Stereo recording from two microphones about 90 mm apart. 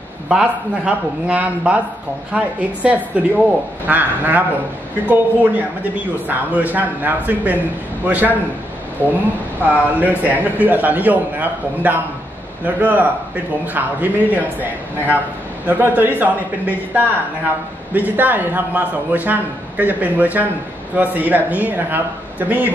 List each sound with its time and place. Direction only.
0.3 s a man's voice: 10° right (ahead or behind)
9.0 s speech: 20° left (ahead or behind)
9.7 s a man's voice: 15° right (ahead or behind)